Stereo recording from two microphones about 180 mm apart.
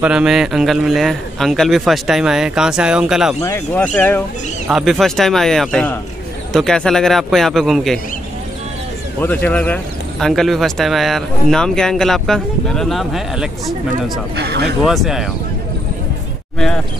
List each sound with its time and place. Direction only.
0.0 s speech: 5° right (ahead or behind)
3.4 s speech: 15° left (ahead or behind)
9.2 s speech: 10° left (ahead or behind)
14.3 s speech: 70° right (ahead or behind)
14.9 s speech: centre (ahead or behind)
16.5 s speech: 5° left (ahead or behind)